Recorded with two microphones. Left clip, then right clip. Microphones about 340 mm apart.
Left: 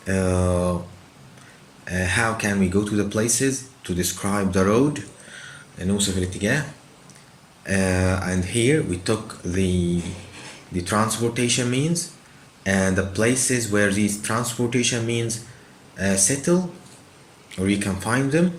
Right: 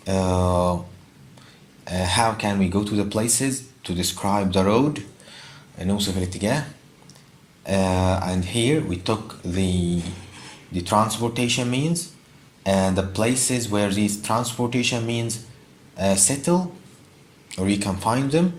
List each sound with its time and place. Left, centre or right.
0.0 s mantra: centre
1.8 s speech: centre
7.7 s speech: centre
10.8 s speech: centre